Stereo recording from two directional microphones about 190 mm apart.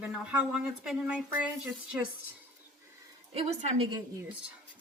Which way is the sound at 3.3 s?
35° right (ahead or behind).